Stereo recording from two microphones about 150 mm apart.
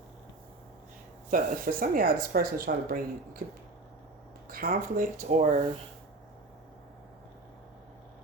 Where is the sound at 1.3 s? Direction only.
70° right (ahead or behind).